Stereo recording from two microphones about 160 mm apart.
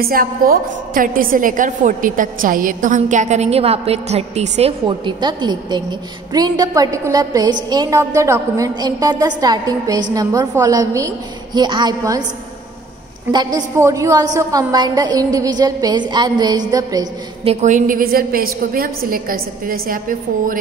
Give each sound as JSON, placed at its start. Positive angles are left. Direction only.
{"t": 0.0, "sound": "a woman's voice", "side_deg": -65}
{"t": 13.3, "sound": "a woman's voice", "side_deg": -25}
{"t": 17.5, "sound": "a woman's voice", "side_deg": -45}